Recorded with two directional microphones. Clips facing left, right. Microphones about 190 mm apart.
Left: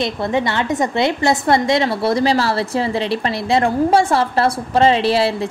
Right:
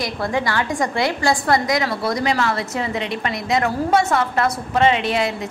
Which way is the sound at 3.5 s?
30° left (ahead or behind).